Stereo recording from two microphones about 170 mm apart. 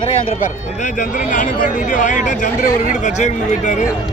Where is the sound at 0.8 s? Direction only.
50° left (ahead or behind).